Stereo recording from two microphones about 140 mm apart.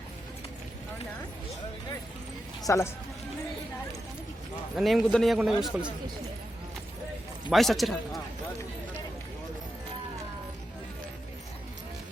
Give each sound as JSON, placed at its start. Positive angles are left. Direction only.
{"t": 2.6, "sound": "speech", "side_deg": 20}
{"t": 4.8, "sound": "a man's voice", "side_deg": 0}
{"t": 7.5, "sound": "a man's voice", "side_deg": 0}